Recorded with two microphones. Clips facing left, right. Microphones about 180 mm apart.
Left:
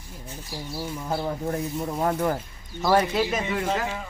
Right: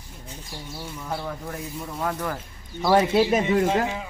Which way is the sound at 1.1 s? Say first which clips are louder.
Left 5 dB; 30° left (ahead or behind).